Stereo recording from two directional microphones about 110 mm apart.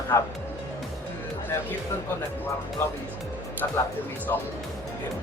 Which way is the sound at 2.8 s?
25° left (ahead or behind).